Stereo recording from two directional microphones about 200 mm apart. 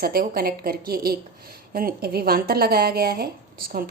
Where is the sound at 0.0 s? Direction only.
50° right (ahead or behind).